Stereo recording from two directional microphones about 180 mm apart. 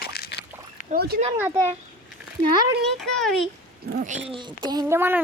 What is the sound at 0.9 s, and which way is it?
Speech, 55° right (ahead or behind).